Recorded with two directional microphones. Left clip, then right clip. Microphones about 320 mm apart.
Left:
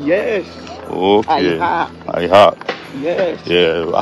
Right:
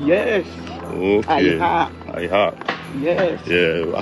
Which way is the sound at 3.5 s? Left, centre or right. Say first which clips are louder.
Left 5 dB; left.